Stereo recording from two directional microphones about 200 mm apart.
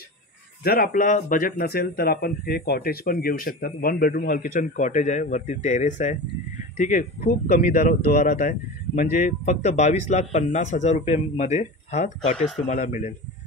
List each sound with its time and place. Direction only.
0.7 s speech: 45° left (ahead or behind)